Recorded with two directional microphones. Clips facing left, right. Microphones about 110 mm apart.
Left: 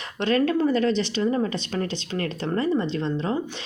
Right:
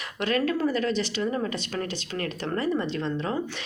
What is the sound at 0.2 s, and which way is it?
Speech, 30° left (ahead or behind).